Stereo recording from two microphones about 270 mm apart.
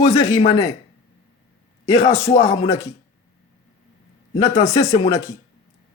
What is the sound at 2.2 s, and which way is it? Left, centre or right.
Music, left.